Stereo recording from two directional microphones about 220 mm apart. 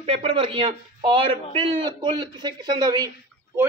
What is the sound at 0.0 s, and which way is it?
A man's voice, 25° right (ahead or behind).